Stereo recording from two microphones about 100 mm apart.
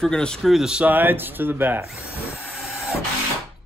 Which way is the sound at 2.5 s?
Centre (ahead or behind).